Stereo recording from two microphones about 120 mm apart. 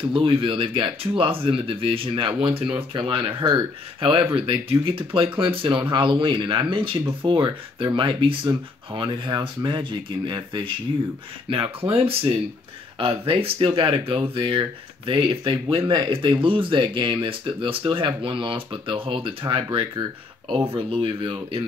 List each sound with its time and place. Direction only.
0.1 s speech: 45° right (ahead or behind)